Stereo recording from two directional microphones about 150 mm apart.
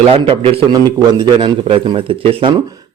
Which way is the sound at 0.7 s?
30° right (ahead or behind).